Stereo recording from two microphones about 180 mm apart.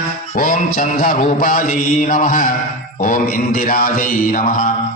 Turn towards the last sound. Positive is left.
turn(degrees=45)  # may be behind; listen again after turning